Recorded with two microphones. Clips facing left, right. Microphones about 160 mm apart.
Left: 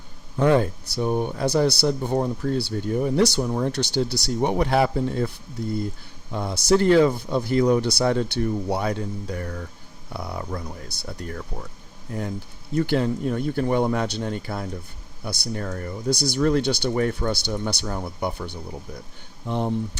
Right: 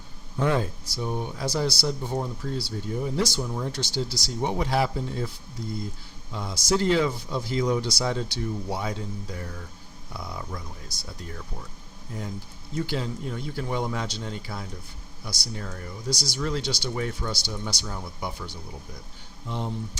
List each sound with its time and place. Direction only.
0.3 s speech: 60° left (ahead or behind)
6.3 s speech: 60° left (ahead or behind)
12.7 s speech: 60° left (ahead or behind)